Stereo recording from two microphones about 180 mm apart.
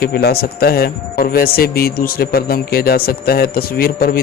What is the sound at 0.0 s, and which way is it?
A man's voice, 60° left (ahead or behind).